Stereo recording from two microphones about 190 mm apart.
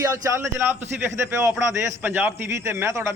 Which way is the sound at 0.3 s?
15° right (ahead or behind).